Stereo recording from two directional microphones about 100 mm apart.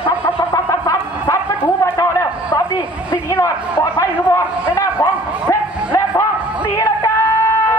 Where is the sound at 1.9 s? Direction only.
30° left (ahead or behind).